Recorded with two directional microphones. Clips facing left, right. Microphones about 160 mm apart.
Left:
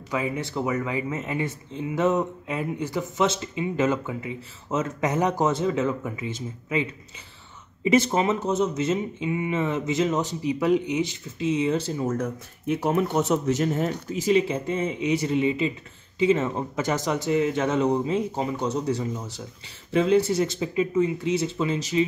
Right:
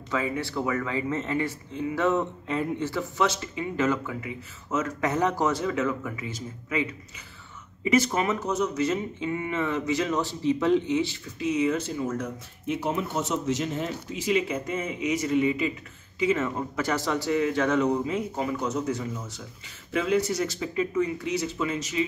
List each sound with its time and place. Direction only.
0.1 s speech: 20° left (ahead or behind); by 14.4 s 40° left (ahead or behind)
14.5 s speech: 30° left (ahead or behind)